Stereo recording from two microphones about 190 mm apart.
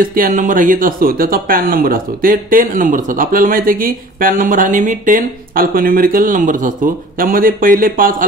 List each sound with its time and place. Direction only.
0.0 s speech: 50° right (ahead or behind)